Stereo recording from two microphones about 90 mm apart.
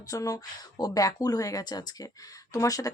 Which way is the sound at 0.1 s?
40° left (ahead or behind).